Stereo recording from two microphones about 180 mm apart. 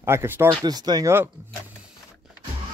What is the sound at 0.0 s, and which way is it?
Speech, 15° right (ahead or behind).